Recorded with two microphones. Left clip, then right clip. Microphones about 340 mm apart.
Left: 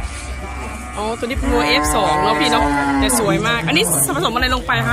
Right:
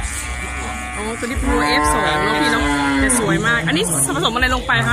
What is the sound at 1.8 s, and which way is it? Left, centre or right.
Speech, centre.